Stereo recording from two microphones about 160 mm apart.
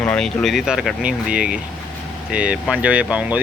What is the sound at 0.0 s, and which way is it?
Speech, 10° left (ahead or behind).